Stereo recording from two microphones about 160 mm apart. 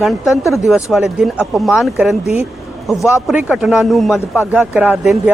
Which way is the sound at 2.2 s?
40° left (ahead or behind).